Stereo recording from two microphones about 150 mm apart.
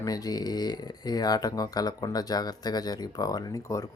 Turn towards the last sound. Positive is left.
turn(degrees=20)  # may be behind; listen again after turning